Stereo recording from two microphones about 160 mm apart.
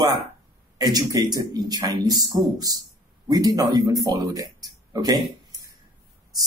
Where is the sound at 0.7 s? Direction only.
25° right (ahead or behind).